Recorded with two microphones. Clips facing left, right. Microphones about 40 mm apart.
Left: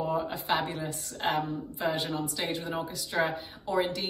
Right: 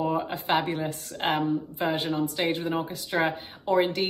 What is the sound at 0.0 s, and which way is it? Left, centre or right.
Speech, right.